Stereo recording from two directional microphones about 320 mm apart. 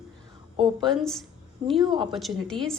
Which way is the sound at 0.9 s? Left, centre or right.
Centre.